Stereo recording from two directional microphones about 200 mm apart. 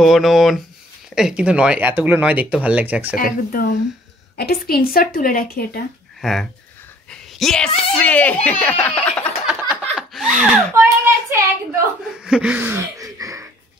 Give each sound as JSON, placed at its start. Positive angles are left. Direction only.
{"t": 0.0, "sound": "speech", "side_deg": 0}
{"t": 3.2, "sound": "speech", "side_deg": 45}
{"t": 6.2, "sound": "speech", "side_deg": 0}
{"t": 7.1, "sound": "whispering", "side_deg": 0}
{"t": 8.0, "sound": "a child's voice", "side_deg": 5}
{"t": 9.9, "sound": "a sound", "side_deg": 0}
{"t": 10.7, "sound": "speech", "side_deg": -15}
{"t": 12.2, "sound": "a sound", "side_deg": -5}